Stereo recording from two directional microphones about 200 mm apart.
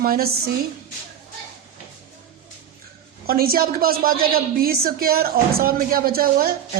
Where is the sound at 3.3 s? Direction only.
50° right (ahead or behind).